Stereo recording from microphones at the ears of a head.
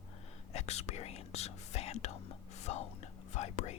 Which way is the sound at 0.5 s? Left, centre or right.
Left.